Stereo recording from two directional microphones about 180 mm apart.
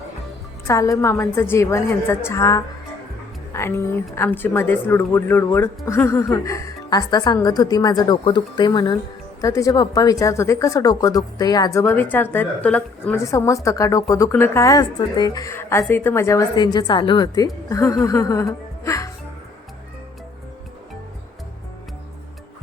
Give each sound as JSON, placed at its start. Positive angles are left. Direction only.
{"t": 0.7, "sound": "speech", "side_deg": 15}